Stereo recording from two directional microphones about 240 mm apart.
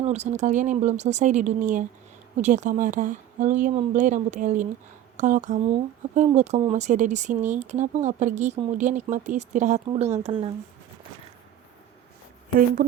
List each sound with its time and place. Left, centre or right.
0.0 s speech: right